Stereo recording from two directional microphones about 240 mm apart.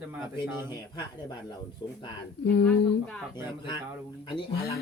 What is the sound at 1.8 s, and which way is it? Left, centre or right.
Speech, centre.